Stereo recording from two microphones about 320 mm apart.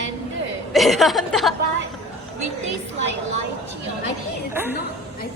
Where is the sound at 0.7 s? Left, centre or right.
Centre.